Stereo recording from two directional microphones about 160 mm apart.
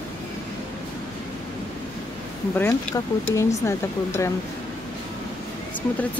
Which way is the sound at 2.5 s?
15° left (ahead or behind).